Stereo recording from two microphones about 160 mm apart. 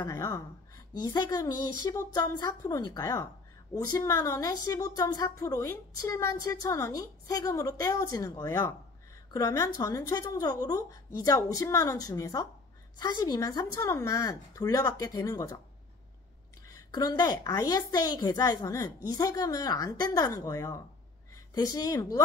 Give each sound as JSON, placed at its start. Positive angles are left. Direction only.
{"t": 0.0, "sound": "a woman's voice", "side_deg": 20}
{"t": 16.6, "sound": "a woman's voice", "side_deg": 20}